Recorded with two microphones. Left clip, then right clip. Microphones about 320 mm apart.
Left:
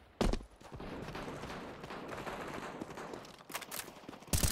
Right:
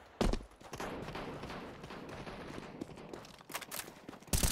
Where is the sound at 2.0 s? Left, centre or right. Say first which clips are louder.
Left 7 dB; centre.